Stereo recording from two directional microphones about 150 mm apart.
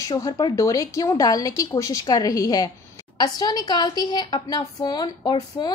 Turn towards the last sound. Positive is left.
turn(degrees=30)  # may be behind; listen again after turning